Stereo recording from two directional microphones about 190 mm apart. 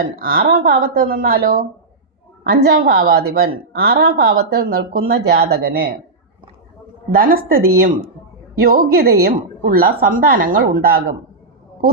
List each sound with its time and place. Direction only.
0.0 s a woman's voice: 50° right (ahead or behind)
7.1 s a woman's voice: 50° right (ahead or behind)